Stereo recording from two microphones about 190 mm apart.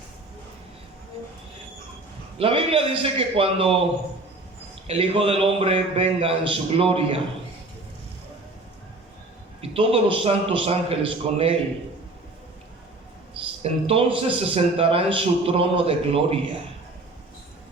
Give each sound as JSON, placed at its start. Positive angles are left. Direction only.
{"t": 2.4, "sound": "a man's voice", "side_deg": -30}
{"t": 4.9, "sound": "a man's voice", "side_deg": -30}
{"t": 9.6, "sound": "a man's voice", "side_deg": -30}
{"t": 13.3, "sound": "a man's voice", "side_deg": -30}